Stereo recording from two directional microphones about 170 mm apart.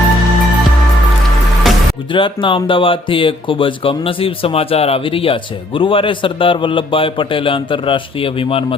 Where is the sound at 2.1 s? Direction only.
30° left (ahead or behind).